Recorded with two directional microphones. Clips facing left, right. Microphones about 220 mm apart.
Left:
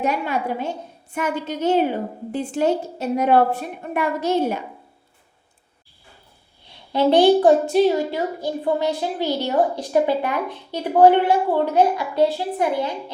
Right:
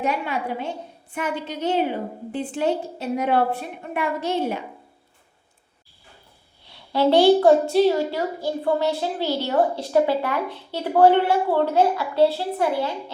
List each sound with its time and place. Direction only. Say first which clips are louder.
0.0 s a woman's voice: left 2 dB; 45° left (ahead or behind)
6.9 s a child's voice: left 1 dB; 20° left (ahead or behind)